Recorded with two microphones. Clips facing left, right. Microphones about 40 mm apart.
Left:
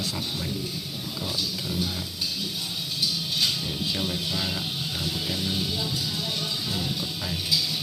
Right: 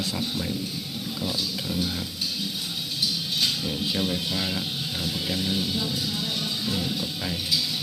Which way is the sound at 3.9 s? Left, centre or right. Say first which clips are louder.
Right 3 dB; centre.